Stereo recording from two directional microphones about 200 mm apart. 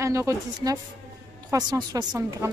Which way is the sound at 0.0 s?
15° right (ahead or behind).